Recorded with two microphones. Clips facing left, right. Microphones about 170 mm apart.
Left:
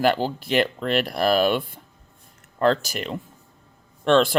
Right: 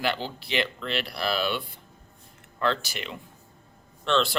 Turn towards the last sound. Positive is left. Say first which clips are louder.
# left 7 dB
turn(degrees=50)  # may be behind; listen again after turning